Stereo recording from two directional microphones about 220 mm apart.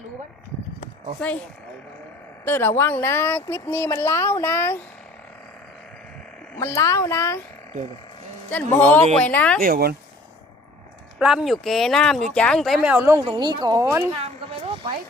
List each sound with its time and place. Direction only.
2.4 s speech: 10° left (ahead or behind)
6.6 s speech: 10° left (ahead or behind)
8.4 s speech: 10° left (ahead or behind)
9.6 s speech: 45° right (ahead or behind)
11.2 s speech: 5° right (ahead or behind)
14.3 s a sound: 25° right (ahead or behind)